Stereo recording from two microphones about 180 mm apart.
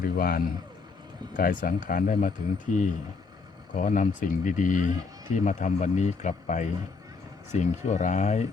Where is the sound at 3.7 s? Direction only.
45° left (ahead or behind).